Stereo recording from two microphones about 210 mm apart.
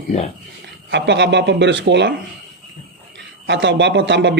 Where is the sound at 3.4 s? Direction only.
55° right (ahead or behind).